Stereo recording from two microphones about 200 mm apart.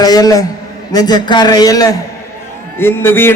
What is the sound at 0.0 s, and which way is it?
A man's voice, 20° left (ahead or behind).